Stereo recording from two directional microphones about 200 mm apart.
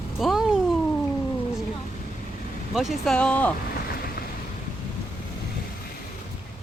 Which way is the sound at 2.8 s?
Centre (ahead or behind).